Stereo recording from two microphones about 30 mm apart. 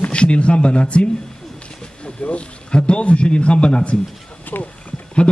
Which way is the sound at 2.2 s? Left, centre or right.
Left.